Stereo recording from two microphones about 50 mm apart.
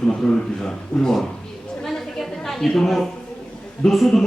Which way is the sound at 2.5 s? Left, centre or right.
Centre.